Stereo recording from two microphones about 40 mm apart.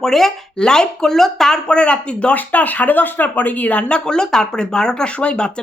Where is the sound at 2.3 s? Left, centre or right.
Left.